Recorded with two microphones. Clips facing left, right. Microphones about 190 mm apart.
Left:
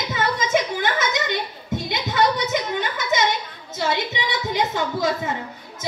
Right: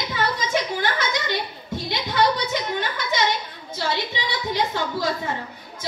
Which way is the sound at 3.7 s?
20° left (ahead or behind).